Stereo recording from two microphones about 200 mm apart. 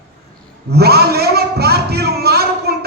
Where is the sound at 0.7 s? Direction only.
50° right (ahead or behind).